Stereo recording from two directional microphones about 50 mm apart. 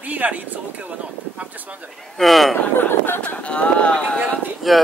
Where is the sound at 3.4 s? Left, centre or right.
Left.